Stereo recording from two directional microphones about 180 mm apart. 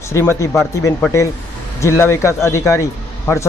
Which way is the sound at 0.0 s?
15° left (ahead or behind).